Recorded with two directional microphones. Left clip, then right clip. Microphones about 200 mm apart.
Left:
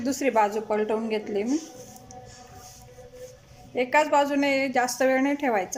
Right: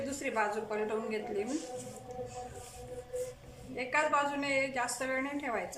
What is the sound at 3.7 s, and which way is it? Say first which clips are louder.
A woman's voice: left 9 dB; 40° left (ahead or behind).